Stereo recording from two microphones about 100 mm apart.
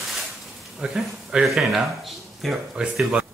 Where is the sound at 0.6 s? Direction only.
Centre (ahead or behind).